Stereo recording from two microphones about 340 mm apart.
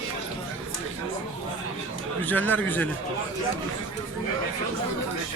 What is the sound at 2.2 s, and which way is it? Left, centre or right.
Speech, centre.